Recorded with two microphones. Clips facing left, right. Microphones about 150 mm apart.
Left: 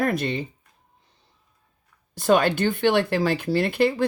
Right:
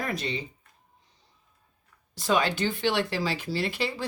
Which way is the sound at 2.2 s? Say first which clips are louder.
Left 6 dB; 55° left (ahead or behind).